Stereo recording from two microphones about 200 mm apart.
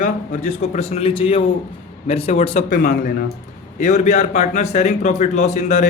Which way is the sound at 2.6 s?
50° left (ahead or behind).